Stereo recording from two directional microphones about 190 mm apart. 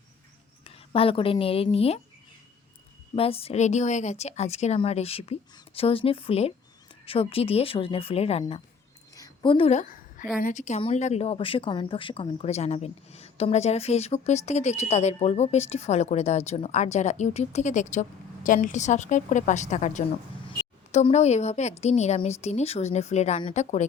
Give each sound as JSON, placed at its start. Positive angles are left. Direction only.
{"t": 0.6, "sound": "speech", "side_deg": 30}
{"t": 3.2, "sound": "speech", "side_deg": 30}
{"t": 9.1, "sound": "a sound", "side_deg": 20}
{"t": 10.3, "sound": "speech", "side_deg": 40}